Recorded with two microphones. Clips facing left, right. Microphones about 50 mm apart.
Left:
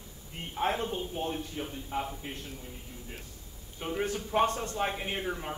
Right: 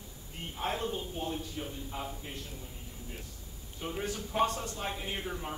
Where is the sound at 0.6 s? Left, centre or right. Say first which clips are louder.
Left 4 dB; left.